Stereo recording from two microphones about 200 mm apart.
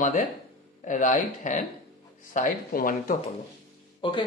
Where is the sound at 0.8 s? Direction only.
40° left (ahead or behind).